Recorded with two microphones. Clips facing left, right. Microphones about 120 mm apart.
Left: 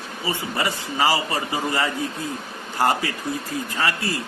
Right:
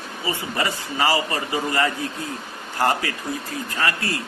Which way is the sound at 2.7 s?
20° left (ahead or behind).